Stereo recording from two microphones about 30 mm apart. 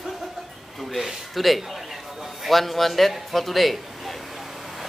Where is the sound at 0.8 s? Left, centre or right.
Centre.